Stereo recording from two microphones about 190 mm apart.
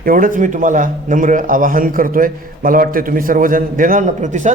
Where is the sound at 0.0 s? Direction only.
45° right (ahead or behind).